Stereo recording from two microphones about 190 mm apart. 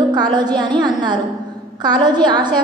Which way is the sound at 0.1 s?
20° right (ahead or behind).